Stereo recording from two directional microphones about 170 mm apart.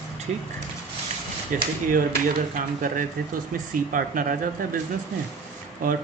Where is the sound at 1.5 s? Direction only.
50° right (ahead or behind).